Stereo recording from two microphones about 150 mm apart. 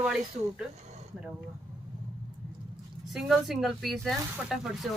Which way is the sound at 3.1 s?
Centre (ahead or behind).